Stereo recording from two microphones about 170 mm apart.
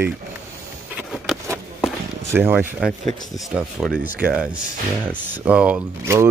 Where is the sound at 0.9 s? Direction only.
Centre (ahead or behind).